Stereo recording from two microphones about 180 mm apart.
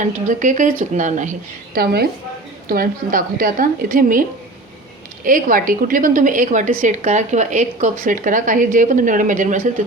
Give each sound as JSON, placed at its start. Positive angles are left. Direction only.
{"t": 0.0, "sound": "a woman's voice", "side_deg": -45}